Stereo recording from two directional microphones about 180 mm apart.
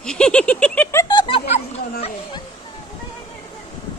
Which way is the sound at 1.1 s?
25° left (ahead or behind).